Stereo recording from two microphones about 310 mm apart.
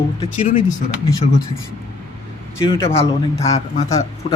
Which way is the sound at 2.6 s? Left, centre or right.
Centre.